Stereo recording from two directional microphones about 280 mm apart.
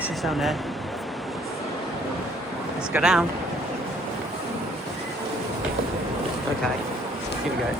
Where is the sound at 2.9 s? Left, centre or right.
Centre.